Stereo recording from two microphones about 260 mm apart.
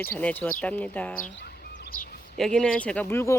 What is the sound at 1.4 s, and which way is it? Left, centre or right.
Bird, left.